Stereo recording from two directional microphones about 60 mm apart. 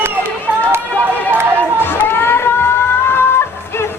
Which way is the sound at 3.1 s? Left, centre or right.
Left.